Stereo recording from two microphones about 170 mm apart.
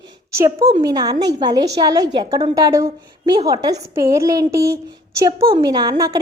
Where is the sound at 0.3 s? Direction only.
20° right (ahead or behind).